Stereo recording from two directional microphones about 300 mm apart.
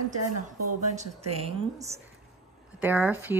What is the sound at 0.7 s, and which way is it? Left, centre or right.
A woman's voice, right.